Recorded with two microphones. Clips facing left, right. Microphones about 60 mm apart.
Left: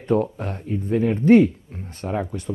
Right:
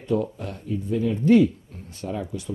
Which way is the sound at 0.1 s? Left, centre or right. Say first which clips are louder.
Left 4 dB; left.